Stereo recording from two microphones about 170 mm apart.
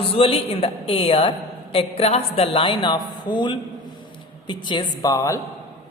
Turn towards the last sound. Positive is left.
turn(degrees=20)  # may be behind; listen again after turning